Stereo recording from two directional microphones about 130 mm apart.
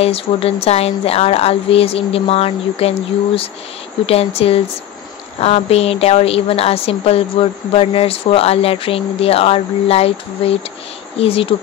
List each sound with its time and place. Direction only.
0.0 s a woman's voice: 50° left (ahead or behind)